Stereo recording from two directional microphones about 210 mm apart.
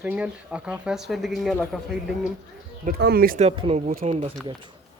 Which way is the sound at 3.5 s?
30° right (ahead or behind).